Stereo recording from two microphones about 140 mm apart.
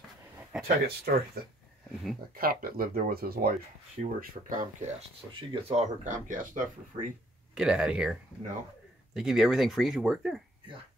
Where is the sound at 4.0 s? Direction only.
75° right (ahead or behind).